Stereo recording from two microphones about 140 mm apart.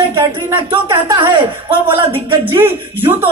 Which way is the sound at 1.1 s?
35° right (ahead or behind).